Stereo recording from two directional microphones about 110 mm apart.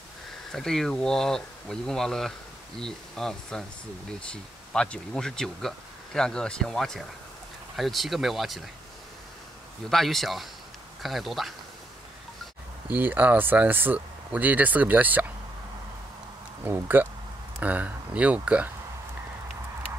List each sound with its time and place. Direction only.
0.5 s speech: 5° left (ahead or behind)
9.8 s speech: centre (ahead or behind)
12.9 s speech: 15° right (ahead or behind)
16.6 s speech: 20° right (ahead or behind)